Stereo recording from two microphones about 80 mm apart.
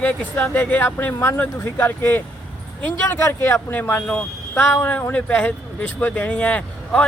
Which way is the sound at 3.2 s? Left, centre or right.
Left.